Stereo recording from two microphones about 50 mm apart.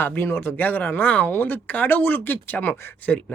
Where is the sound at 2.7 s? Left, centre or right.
Left.